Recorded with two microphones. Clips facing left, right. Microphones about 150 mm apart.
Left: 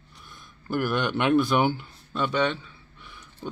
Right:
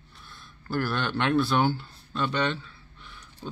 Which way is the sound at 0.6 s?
15° left (ahead or behind).